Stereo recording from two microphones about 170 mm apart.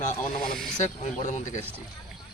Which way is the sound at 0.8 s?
45° left (ahead or behind).